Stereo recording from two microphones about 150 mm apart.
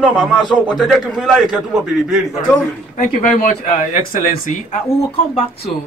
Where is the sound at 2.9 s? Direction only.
60° left (ahead or behind).